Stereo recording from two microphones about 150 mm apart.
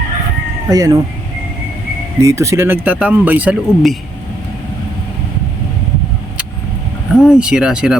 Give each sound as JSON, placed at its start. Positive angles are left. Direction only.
{"t": 0.7, "sound": "speech", "side_deg": -25}
{"t": 2.2, "sound": "speech", "side_deg": -20}
{"t": 7.2, "sound": "speech", "side_deg": -5}